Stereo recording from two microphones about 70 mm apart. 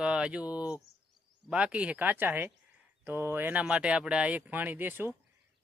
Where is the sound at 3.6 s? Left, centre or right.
Centre.